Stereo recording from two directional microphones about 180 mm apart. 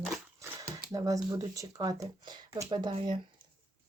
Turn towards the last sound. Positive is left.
turn(degrees=-30)  # may be behind; listen again after turning